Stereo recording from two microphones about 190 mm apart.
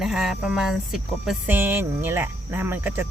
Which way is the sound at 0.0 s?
Centre (ahead or behind).